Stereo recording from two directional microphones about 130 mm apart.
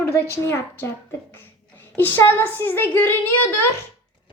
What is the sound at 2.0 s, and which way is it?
A woman's voice, 15° left (ahead or behind).